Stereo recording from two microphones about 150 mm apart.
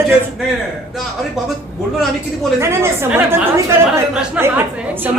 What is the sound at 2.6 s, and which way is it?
A woman's voice, 15° right (ahead or behind).